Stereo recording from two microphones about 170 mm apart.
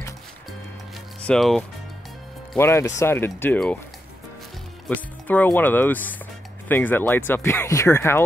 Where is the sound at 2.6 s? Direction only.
15° left (ahead or behind).